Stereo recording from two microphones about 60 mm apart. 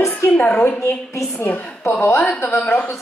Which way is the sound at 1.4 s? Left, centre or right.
Left.